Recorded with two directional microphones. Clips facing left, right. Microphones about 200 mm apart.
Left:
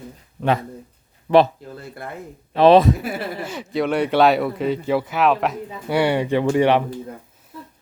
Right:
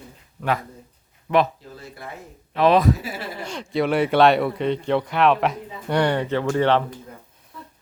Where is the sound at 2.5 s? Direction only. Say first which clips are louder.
Left 5 dB; 30° left (ahead or behind).